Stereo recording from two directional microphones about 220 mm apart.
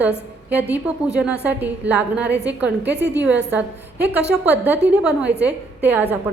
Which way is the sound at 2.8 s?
50° right (ahead or behind).